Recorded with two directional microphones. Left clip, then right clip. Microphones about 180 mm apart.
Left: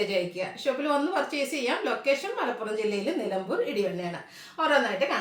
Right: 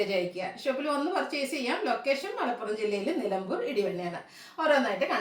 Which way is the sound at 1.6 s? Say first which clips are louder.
Left 2 dB; 15° left (ahead or behind).